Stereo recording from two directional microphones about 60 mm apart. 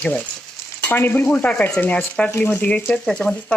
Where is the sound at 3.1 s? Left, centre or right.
Centre.